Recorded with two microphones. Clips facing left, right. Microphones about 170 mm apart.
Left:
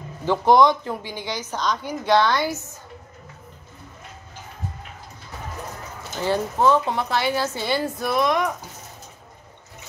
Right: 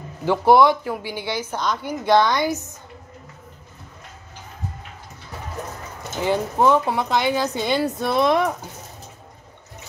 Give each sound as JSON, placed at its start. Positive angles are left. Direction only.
{"t": 0.2, "sound": "a woman's voice", "side_deg": -10}
{"t": 6.2, "sound": "a woman's voice", "side_deg": -15}
{"t": 8.0, "sound": "speech", "side_deg": -30}